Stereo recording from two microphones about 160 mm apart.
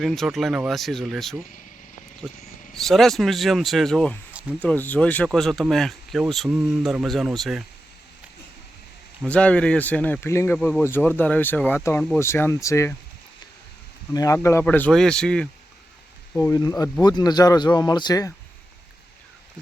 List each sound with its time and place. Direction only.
0.0 s speech: centre (ahead or behind)
2.7 s speech: centre (ahead or behind)
9.2 s speech: 10° left (ahead or behind)
14.1 s speech: 20° left (ahead or behind); by 15.4 s 5° left (ahead or behind)
16.3 s speech: 15° left (ahead or behind)